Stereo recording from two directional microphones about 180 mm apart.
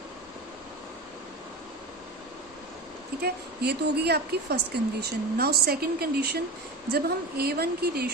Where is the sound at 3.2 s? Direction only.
65° right (ahead or behind).